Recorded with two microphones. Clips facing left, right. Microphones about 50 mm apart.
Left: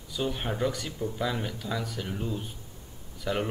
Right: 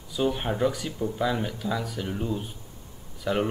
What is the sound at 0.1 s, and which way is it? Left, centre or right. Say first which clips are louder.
Speech: right 5 dB; centre.